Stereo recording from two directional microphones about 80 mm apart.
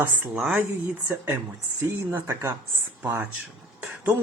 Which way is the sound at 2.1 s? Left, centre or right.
Right.